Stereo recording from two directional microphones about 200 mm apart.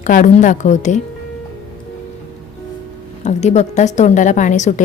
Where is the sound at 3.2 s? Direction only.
35° left (ahead or behind).